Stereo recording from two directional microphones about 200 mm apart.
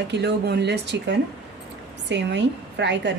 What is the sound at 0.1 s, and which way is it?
Speech, 55° right (ahead or behind).